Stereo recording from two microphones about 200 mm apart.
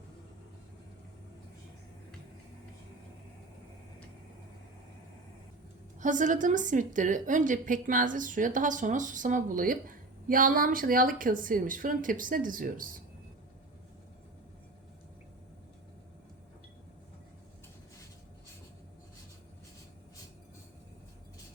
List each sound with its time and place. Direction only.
6.0 s a woman's voice: 40° right (ahead or behind)